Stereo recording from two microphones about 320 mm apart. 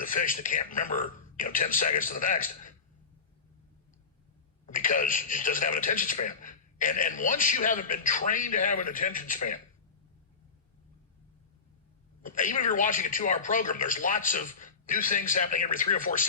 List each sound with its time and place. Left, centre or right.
0.0 s speech: left
4.7 s speech: left
12.2 s speech: left